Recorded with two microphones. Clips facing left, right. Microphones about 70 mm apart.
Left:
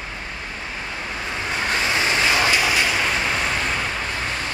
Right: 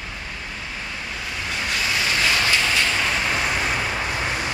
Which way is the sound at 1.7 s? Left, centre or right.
Left.